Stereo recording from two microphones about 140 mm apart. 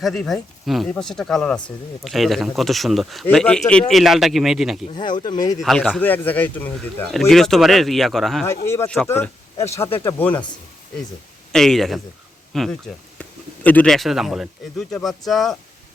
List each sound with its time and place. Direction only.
0.0 s speech: 5° left (ahead or behind)
4.9 s speech: 30° left (ahead or behind)
5.5 s speech: centre (ahead or behind)
6.0 s speech: 10° left (ahead or behind)
7.1 s speech: centre (ahead or behind)
8.4 s speech: 20° left (ahead or behind)
11.5 s speech: 5° left (ahead or behind)